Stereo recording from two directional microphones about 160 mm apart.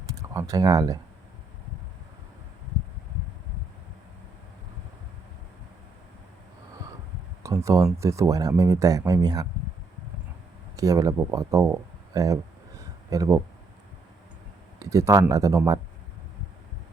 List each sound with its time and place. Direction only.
0.1 s speech: 20° right (ahead or behind)
7.4 s speech: 20° right (ahead or behind)
10.8 s speech: 20° right (ahead or behind)
14.8 s speech: 20° right (ahead or behind)